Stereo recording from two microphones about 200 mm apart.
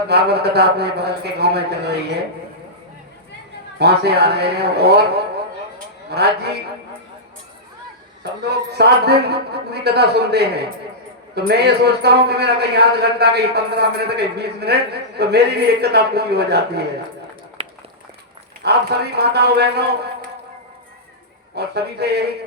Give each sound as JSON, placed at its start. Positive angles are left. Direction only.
{"t": 0.1, "sound": "a man's voice", "side_deg": -55}
{"t": 3.8, "sound": "a man's voice", "side_deg": -55}
{"t": 8.2, "sound": "a man's voice", "side_deg": -55}
{"t": 17.6, "sound": "run", "side_deg": -30}
{"t": 18.6, "sound": "a man's voice", "side_deg": -55}
{"t": 21.5, "sound": "a man's voice", "side_deg": -55}